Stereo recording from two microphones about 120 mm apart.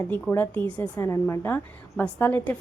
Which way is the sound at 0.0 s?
20° left (ahead or behind).